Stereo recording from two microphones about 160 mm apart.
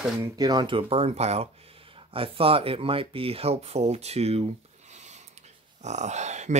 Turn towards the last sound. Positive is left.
turn(degrees=-45)  # may be behind; listen again after turning